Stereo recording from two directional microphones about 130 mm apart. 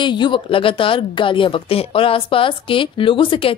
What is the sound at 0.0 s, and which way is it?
Speech, 35° left (ahead or behind).